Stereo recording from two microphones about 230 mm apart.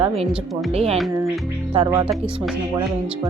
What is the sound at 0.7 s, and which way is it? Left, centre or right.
Speech, right.